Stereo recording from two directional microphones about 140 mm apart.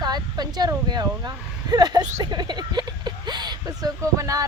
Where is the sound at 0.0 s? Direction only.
30° right (ahead or behind).